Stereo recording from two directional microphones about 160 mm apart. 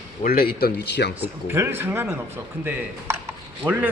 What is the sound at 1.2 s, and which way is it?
Speech, 15° right (ahead or behind).